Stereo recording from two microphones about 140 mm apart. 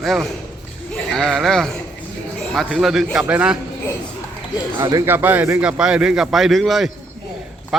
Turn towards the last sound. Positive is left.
turn(degrees=0)  # may be behind; listen again after turning